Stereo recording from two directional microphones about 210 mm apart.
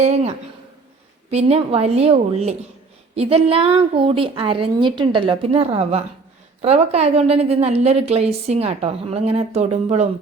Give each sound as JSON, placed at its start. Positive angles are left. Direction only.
{"t": 0.0, "sound": "a woman's voice", "side_deg": -30}